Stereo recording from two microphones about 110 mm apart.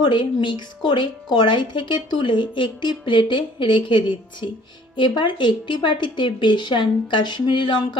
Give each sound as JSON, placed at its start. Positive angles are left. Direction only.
{"t": 0.0, "sound": "a woman's voice", "side_deg": 45}